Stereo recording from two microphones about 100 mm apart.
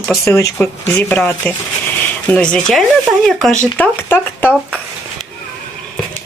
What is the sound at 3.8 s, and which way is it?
Speech, 20° left (ahead or behind).